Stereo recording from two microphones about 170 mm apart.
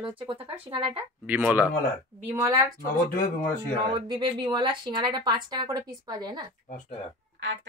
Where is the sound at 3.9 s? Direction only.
25° right (ahead or behind).